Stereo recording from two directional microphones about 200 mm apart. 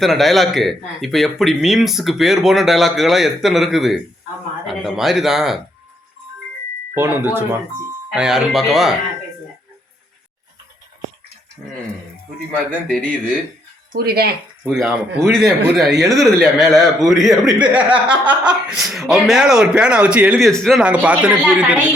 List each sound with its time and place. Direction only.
0.0 s speech: centre (ahead or behind)
6.9 s speech: 10° right (ahead or behind)
12.9 s speech: 5° left (ahead or behind)
13.9 s speech: 50° right (ahead or behind)
14.6 s speech: centre (ahead or behind)